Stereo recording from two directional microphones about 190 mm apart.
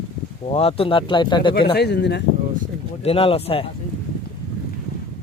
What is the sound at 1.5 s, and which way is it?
Speech, 55° left (ahead or behind).